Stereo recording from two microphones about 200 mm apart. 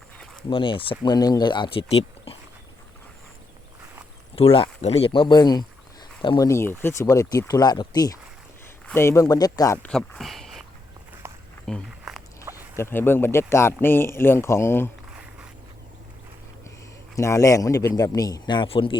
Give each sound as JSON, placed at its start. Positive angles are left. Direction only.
{"t": 0.5, "sound": "speech", "side_deg": 25}
{"t": 4.4, "sound": "speech", "side_deg": 30}
{"t": 11.2, "sound": "walk", "side_deg": -10}
{"t": 11.6, "sound": "walk", "side_deg": 0}
{"t": 12.7, "sound": "speech", "side_deg": 10}
{"t": 15.1, "sound": "a sound", "side_deg": -5}
{"t": 17.2, "sound": "speech", "side_deg": 15}